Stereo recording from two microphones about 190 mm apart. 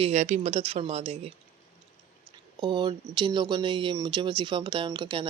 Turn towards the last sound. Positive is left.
turn(degrees=-25)  # may be behind; listen again after turning